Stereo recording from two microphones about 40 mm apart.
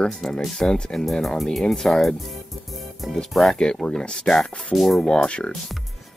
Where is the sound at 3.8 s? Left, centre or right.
Centre.